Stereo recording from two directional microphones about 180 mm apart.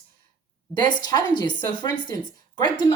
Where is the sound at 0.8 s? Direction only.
25° left (ahead or behind).